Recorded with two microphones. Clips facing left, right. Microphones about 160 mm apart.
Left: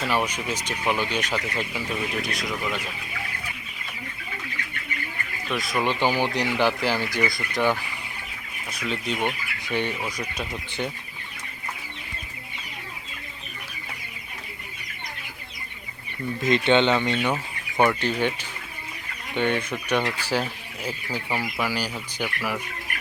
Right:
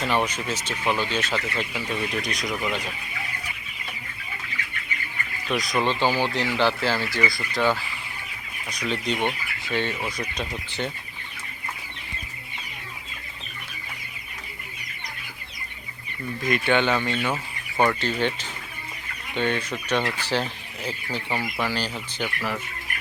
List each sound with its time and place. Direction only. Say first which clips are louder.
0.0 s speech: right 1 dB; 10° left (ahead or behind)
5.5 s speech: right 2 dB; centre (ahead or behind)
5.8 s speech: left 1 dB; 15° left (ahead or behind)
8.7 s speech: right 2 dB; 5° left (ahead or behind)
9.6 s speech: even; 15° left (ahead or behind)
16.4 s speech: left 3 dB; 20° left (ahead or behind)